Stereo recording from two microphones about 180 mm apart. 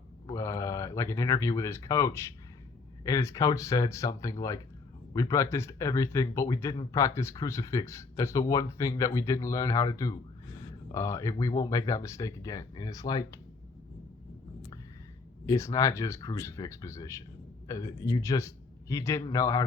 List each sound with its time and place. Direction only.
0.3 s speech: 15° left (ahead or behind)
15.4 s speech: 15° left (ahead or behind)